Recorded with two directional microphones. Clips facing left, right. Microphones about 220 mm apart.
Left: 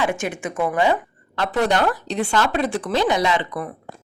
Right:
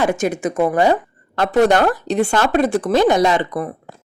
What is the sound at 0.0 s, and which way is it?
Speech, 40° right (ahead or behind).